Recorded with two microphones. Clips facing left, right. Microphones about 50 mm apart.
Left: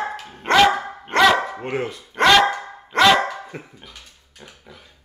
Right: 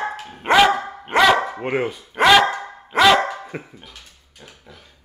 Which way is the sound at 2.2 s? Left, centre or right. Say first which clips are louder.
Right 1 dB; centre.